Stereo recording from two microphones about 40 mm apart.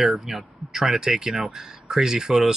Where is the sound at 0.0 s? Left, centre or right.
Centre.